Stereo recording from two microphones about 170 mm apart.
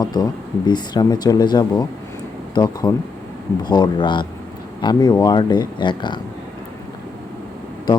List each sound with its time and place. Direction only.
0.0 s speech: 25° left (ahead or behind)